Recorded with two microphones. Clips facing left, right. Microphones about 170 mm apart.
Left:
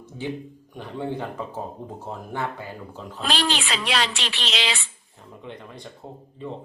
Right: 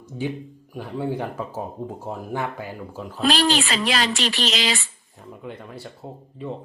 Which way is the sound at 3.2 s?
Centre (ahead or behind).